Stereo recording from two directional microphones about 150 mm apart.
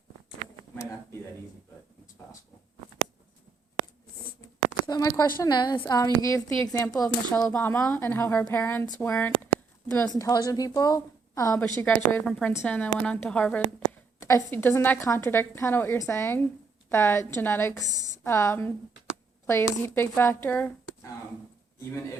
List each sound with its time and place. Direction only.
0.8 s speech: 20° left (ahead or behind)
4.9 s a woman's voice: 25° left (ahead or behind)
7.3 s a woman's voice: 10° left (ahead or behind)
10.2 s a woman's voice: 25° left (ahead or behind)